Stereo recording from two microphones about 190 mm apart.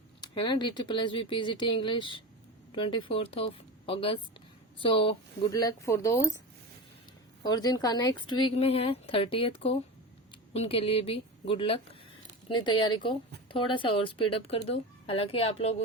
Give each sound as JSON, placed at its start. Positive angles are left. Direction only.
{"t": 0.2, "sound": "speech", "side_deg": 25}
{"t": 7.4, "sound": "speech", "side_deg": 20}